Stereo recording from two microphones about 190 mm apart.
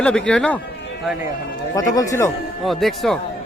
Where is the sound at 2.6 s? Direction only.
Centre (ahead or behind).